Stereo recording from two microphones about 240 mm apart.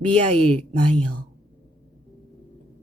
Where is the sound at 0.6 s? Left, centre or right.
Right.